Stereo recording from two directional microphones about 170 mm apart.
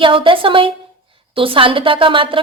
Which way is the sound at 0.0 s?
30° right (ahead or behind).